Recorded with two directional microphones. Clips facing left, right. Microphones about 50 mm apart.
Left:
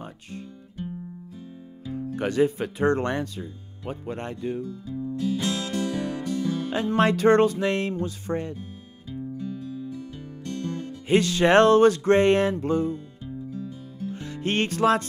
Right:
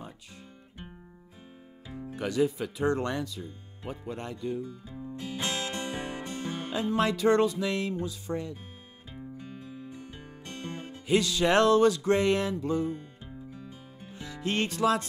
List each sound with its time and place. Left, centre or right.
0.0 s music: left
2.1 s speech: left
5.1 s music: right
6.7 s music: left
9.1 s music: right
11.1 s music: left
13.5 s music: right
14.1 s music: left